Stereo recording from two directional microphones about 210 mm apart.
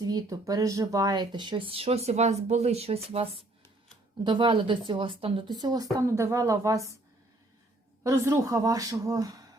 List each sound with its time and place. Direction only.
0.0 s speech: 20° right (ahead or behind)
8.0 s a woman's voice: 15° right (ahead or behind)